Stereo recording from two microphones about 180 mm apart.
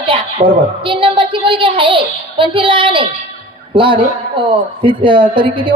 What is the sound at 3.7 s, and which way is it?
Speech, 30° right (ahead or behind).